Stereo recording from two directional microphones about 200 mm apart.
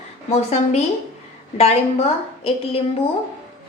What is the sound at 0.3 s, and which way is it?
A woman's voice, 30° left (ahead or behind).